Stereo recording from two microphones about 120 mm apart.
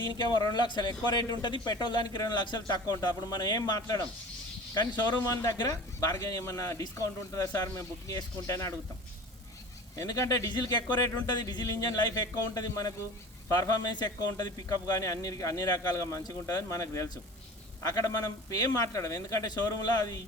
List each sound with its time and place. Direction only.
0.0 s a man's voice: 35° left (ahead or behind)
9.9 s a man's voice: 25° left (ahead or behind)